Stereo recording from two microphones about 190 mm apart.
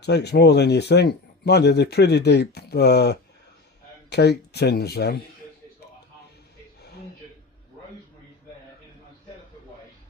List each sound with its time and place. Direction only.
0.0 s speech: 60° left (ahead or behind)